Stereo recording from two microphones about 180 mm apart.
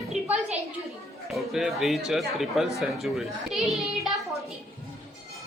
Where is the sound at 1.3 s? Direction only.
Centre (ahead or behind).